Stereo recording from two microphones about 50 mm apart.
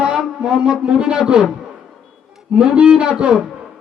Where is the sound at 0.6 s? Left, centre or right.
Centre.